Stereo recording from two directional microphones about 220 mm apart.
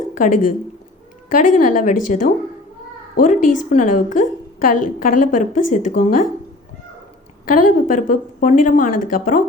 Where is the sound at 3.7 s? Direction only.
35° left (ahead or behind).